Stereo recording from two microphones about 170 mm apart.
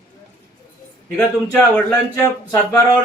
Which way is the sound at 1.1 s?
10° left (ahead or behind).